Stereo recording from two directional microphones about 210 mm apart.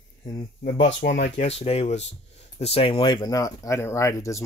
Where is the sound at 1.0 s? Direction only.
50° left (ahead or behind).